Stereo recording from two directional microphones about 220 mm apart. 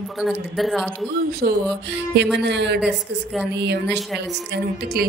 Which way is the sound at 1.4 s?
45° right (ahead or behind).